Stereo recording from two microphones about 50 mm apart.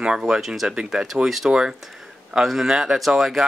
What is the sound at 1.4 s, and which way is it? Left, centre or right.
Speech, centre.